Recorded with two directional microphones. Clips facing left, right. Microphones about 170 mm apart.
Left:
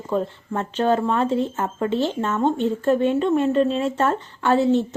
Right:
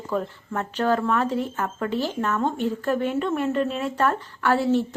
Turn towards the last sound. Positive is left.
turn(degrees=20)  # may be behind; listen again after turning